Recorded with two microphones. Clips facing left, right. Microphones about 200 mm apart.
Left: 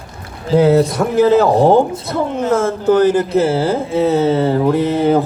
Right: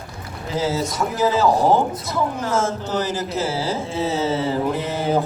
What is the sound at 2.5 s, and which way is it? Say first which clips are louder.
Speech: left 12 dB; 55° left (ahead or behind).